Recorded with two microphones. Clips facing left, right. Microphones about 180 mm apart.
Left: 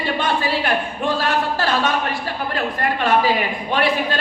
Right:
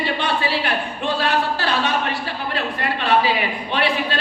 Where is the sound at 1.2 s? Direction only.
45° left (ahead or behind).